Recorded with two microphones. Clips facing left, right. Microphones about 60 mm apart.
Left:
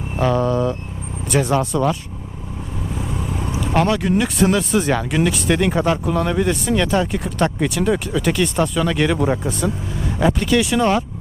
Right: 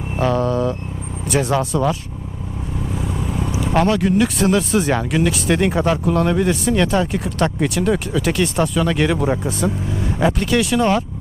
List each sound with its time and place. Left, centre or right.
0.2 s vehicle: centre
1.3 s speech: centre
3.0 s vehicle: left
3.6 s speech: centre